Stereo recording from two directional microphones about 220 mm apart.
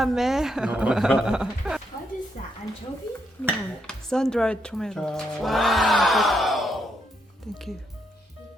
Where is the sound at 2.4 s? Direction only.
35° left (ahead or behind).